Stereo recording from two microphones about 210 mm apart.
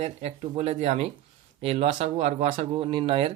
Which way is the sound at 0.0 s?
30° right (ahead or behind).